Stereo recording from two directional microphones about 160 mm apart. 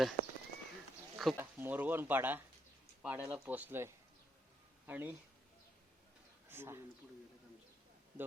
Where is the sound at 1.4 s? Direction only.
10° right (ahead or behind).